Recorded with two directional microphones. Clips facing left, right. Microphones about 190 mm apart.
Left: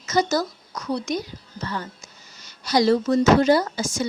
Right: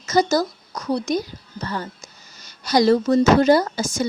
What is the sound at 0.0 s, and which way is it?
A woman's voice, 35° right (ahead or behind).